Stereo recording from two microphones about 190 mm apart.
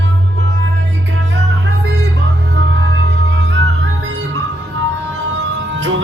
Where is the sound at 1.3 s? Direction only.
60° right (ahead or behind).